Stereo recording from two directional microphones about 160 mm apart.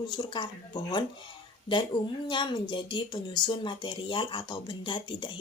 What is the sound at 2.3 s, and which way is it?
Speech, 30° left (ahead or behind).